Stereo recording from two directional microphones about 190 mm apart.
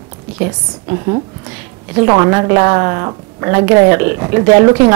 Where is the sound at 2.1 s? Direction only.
20° right (ahead or behind).